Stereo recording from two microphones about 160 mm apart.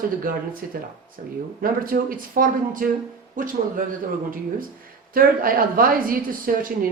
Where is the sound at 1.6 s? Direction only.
65° right (ahead or behind).